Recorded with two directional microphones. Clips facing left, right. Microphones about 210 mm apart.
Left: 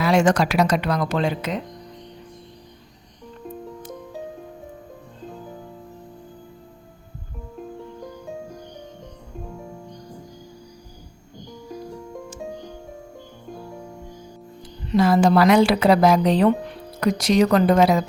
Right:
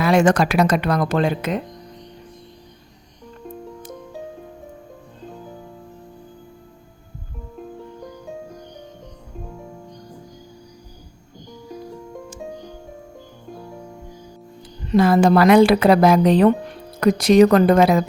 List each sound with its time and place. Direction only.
0.0 s speech: 55° right (ahead or behind)
3.4 s music: centre (ahead or behind)
7.6 s music: centre (ahead or behind)
11.7 s music: centre (ahead or behind)
14.9 s speech: 55° right (ahead or behind)